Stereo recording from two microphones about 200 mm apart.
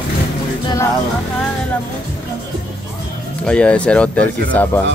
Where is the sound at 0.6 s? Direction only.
15° left (ahead or behind).